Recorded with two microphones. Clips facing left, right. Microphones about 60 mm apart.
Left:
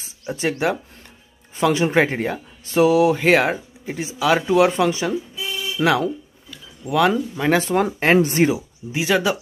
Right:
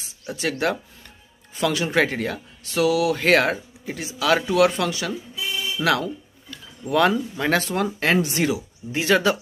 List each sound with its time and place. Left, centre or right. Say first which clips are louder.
0.3 s speech: left 2 dB; left
3.2 s speech: left 2 dB; centre
5.8 s speech: left 3 dB; left
6.5 s speech: left 1 dB; centre
7.6 s speech: left 4 dB; left
8.9 s speech: even; centre